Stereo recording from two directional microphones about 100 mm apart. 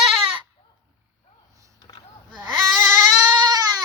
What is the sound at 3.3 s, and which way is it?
Baby cry, 40° right (ahead or behind).